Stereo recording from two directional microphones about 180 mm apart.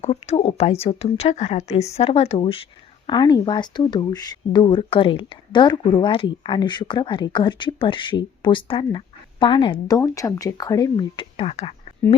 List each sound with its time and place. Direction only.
0.0 s speech: 35° left (ahead or behind)